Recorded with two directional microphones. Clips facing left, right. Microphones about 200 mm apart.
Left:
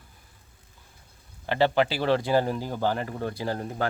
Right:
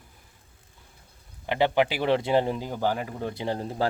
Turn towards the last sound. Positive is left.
turn(degrees=-25)  # may be behind; listen again after turning